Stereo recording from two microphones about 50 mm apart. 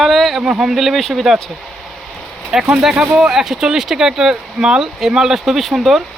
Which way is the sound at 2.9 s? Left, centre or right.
Centre.